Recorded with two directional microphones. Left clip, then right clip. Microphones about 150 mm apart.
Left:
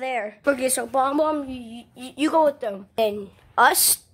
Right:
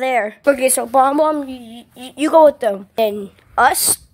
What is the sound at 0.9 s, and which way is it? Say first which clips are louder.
Speech: right 8 dB; 35° right (ahead or behind).